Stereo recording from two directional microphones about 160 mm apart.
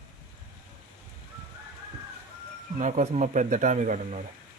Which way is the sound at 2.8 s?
50° right (ahead or behind).